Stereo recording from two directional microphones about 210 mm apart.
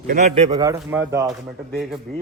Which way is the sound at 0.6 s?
15° right (ahead or behind).